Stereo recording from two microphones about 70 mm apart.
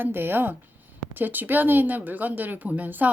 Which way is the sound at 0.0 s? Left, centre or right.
Right.